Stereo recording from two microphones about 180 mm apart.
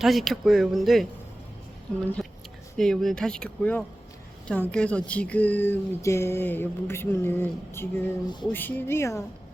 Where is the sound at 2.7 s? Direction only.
Centre (ahead or behind).